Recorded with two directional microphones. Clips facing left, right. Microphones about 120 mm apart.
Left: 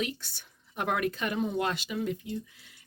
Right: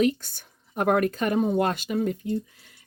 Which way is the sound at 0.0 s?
45° right (ahead or behind).